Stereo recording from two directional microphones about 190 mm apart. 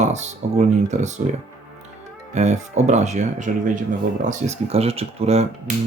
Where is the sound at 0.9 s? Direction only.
35° right (ahead or behind).